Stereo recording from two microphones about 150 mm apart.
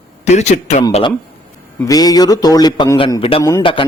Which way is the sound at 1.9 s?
25° left (ahead or behind).